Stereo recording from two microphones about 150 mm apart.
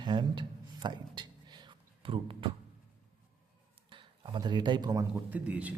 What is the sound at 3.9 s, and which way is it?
Speech, 35° right (ahead or behind).